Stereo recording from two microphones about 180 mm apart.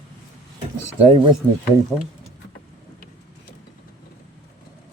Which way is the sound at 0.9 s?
35° right (ahead or behind).